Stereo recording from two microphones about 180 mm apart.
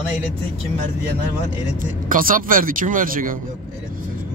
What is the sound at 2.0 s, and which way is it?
Speech, 50° right (ahead or behind).